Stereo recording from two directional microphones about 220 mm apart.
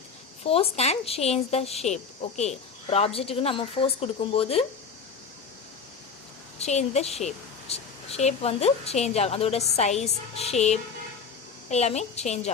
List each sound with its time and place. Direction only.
0.4 s speech: 25° left (ahead or behind)
6.6 s a woman's voice: 30° left (ahead or behind)